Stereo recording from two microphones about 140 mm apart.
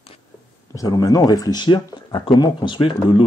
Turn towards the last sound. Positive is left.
turn(degrees=40)  # may be behind; listen again after turning